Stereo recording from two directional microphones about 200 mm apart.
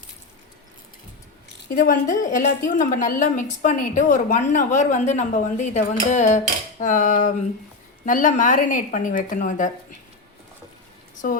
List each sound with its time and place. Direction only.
1.7 s a woman's voice: 45° left (ahead or behind)
11.2 s a woman's voice: 45° left (ahead or behind)